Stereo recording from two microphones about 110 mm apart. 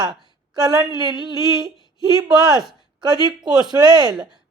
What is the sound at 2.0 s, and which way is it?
A woman's voice, 40° right (ahead or behind).